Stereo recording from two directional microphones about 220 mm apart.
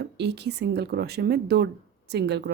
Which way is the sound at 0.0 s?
50° right (ahead or behind).